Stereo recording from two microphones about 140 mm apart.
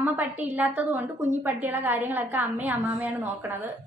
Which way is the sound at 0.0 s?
15° right (ahead or behind).